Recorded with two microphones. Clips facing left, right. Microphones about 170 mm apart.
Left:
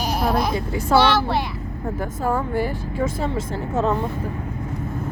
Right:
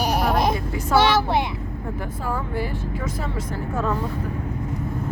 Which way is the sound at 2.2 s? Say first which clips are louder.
Left 6 dB; 50° left (ahead or behind).